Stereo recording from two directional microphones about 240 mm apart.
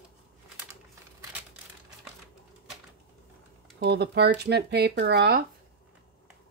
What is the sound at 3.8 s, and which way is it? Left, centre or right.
Speech, right.